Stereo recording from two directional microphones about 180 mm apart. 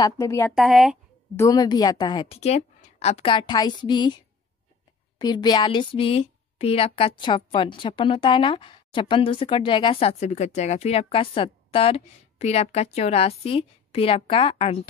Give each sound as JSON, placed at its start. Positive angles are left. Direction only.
{"t": 0.0, "sound": "speech", "side_deg": 20}
{"t": 0.6, "sound": "a woman's voice", "side_deg": 0}
{"t": 1.3, "sound": "a woman's voice", "side_deg": 15}
{"t": 5.2, "sound": "a woman's voice", "side_deg": 25}